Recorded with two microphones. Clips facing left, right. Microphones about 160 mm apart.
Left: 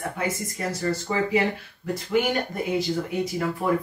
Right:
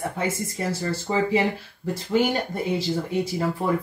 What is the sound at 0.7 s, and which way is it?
Speech, 30° right (ahead or behind).